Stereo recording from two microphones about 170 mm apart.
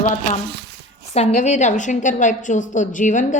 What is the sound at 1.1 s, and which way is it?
A woman's voice, 45° left (ahead or behind).